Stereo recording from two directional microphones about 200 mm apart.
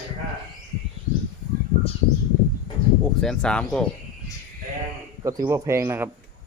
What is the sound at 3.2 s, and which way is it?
Speech, 5° left (ahead or behind).